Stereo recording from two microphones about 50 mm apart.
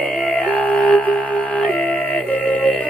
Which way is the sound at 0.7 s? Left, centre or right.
Left.